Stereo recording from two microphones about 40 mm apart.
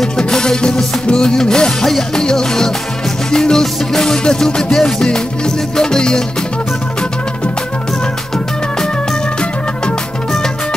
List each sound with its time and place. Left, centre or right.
0.2 s music: centre